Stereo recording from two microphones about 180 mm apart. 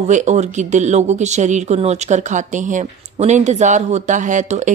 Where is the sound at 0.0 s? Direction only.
40° right (ahead or behind).